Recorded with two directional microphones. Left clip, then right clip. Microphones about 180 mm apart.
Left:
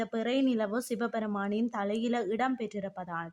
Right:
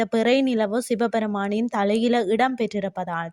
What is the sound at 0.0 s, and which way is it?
Speech, 40° right (ahead or behind).